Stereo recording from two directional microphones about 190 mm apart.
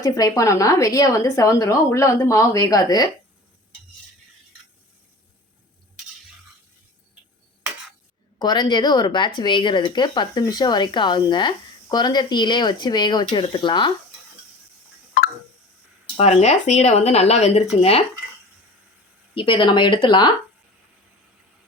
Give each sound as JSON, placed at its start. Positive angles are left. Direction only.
{"t": 0.0, "sound": "a woman's voice", "side_deg": 20}
{"t": 8.4, "sound": "speech", "side_deg": 20}
{"t": 16.1, "sound": "speech", "side_deg": 35}
{"t": 19.3, "sound": "speech", "side_deg": 25}